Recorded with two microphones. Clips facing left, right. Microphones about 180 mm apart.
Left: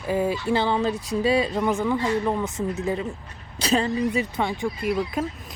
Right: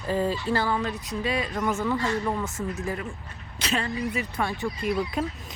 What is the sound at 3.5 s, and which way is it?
Speech, 35° left (ahead or behind).